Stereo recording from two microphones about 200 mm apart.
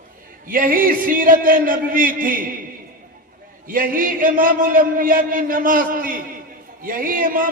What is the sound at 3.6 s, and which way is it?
A man's voice, 45° right (ahead or behind).